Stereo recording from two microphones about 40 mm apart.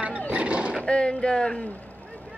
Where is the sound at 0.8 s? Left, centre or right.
Left.